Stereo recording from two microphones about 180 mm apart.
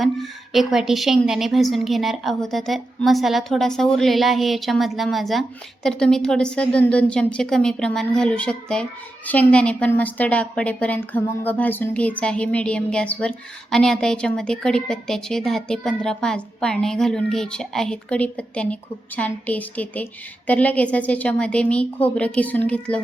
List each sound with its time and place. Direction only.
0.0 s a woman's voice: centre (ahead or behind)